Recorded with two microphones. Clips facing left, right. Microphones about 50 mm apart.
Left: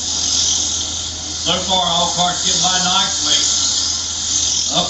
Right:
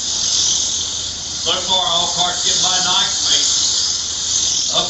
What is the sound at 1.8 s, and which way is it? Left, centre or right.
Speech, left.